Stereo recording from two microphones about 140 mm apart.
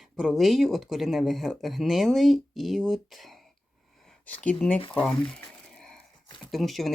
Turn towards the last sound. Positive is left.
turn(degrees=0)  # may be behind; listen again after turning